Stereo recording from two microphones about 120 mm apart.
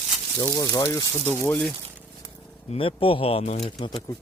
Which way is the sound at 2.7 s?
50° left (ahead or behind).